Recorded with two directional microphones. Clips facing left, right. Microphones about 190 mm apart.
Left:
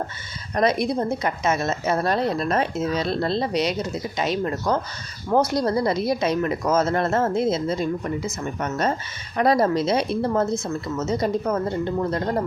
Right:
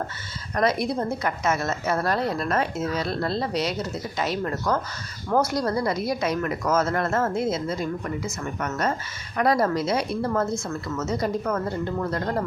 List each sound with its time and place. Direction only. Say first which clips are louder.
0.5 s a woman's voice: left 2 dB; 20° left (ahead or behind)